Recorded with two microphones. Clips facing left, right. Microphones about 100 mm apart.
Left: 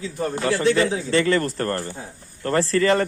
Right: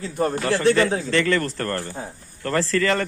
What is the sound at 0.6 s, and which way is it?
Speech, 50° right (ahead or behind).